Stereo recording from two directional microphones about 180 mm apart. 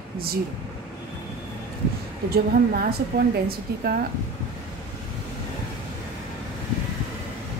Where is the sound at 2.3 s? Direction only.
60° right (ahead or behind).